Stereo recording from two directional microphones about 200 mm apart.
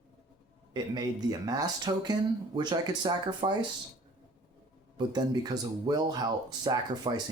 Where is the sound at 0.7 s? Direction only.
20° right (ahead or behind).